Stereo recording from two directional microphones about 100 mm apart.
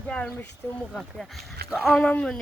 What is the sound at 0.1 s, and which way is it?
Speech, 10° left (ahead or behind).